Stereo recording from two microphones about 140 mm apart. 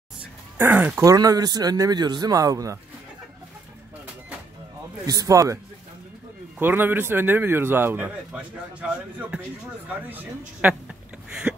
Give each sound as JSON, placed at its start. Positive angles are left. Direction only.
{"t": 0.6, "sound": "a man's voice", "side_deg": -15}
{"t": 1.0, "sound": "a man's voice", "side_deg": -25}
{"t": 5.0, "sound": "a man's voice", "side_deg": -25}
{"t": 6.6, "sound": "a man's voice", "side_deg": -15}
{"t": 9.8, "sound": "a man's voice", "side_deg": -10}